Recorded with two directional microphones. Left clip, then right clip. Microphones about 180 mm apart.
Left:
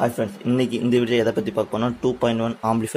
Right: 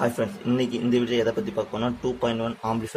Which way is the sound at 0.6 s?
30° left (ahead or behind).